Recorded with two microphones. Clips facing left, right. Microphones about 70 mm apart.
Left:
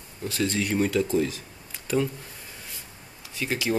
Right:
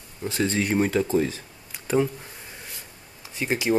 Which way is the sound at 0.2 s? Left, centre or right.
Right.